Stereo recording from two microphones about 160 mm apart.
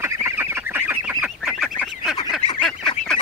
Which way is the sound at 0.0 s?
15° right (ahead or behind).